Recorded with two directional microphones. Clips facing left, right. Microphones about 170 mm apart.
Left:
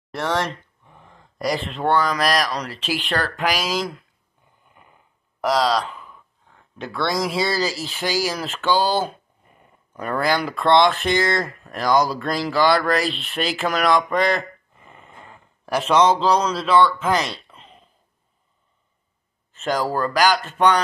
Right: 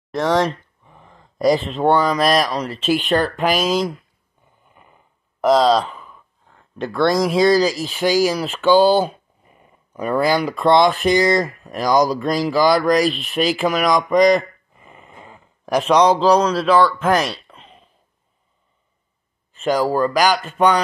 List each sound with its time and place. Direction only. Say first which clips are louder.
0.1 s speech: right 6 dB; 15° right (ahead or behind)
5.4 s speech: right 6 dB; 20° right (ahead or behind)
6.9 s a man's voice: right 6 dB; 15° right (ahead or behind)
19.5 s speech: right 5 dB; 15° right (ahead or behind)